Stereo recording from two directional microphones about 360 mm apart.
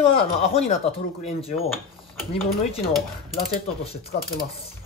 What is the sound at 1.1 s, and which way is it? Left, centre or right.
Speech, centre.